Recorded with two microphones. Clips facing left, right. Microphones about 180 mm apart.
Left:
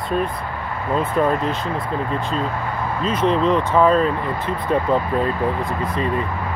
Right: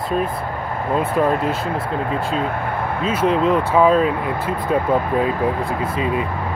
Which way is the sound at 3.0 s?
5° right (ahead or behind).